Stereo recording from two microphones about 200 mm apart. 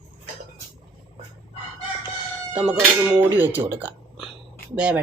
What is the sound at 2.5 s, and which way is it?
A woman's voice, 5° right (ahead or behind).